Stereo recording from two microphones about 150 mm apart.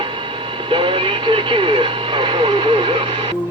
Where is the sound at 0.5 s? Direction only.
35° right (ahead or behind).